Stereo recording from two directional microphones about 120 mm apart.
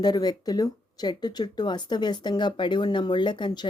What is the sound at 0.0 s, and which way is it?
Speech, 35° left (ahead or behind).